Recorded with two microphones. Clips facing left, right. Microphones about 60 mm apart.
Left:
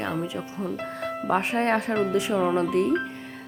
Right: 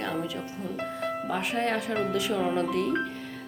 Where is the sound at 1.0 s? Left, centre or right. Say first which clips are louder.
Even; centre.